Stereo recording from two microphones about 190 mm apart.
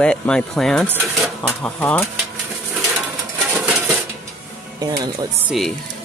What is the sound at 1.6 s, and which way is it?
Speech, 5° left (ahead or behind).